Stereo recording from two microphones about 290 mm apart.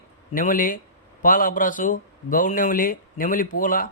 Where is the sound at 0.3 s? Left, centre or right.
Left.